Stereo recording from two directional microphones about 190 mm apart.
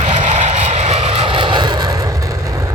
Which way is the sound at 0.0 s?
40° right (ahead or behind).